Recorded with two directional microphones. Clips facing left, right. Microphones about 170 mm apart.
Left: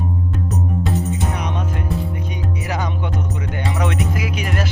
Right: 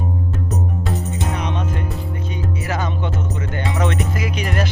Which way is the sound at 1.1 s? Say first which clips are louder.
Even; 10° left (ahead or behind).